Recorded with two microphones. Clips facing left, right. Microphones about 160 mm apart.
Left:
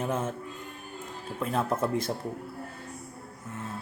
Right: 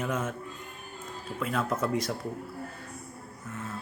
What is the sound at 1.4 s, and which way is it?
Speech, 30° left (ahead or behind).